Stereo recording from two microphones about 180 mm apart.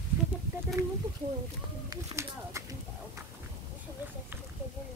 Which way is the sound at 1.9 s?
15° right (ahead or behind).